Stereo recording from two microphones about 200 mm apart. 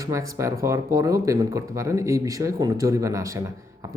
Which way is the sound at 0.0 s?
15° right (ahead or behind).